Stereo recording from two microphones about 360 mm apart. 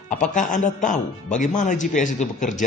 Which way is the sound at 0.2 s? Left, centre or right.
Left.